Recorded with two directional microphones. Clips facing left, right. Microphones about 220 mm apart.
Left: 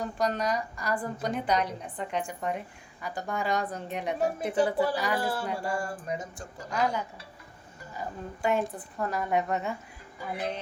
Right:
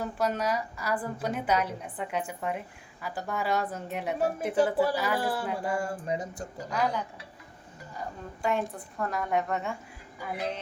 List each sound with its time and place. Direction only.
0.0 s a woman's voice: 5° right (ahead or behind)
5.7 s a sound: 25° right (ahead or behind)
6.7 s a woman's voice: centre (ahead or behind)